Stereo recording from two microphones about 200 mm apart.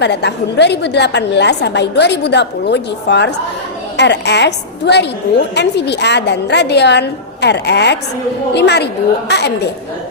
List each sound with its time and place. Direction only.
0.0 s a woman's voice: 60° left (ahead or behind)